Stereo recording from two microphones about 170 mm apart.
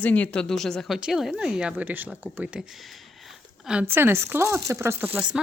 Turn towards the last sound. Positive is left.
turn(degrees=-10)  # may be behind; listen again after turning